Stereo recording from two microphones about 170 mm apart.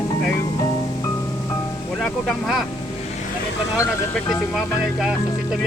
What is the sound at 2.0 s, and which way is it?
Speech, centre (ahead or behind).